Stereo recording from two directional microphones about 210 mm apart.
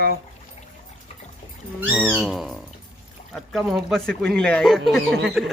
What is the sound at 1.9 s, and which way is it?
Speech, centre (ahead or behind).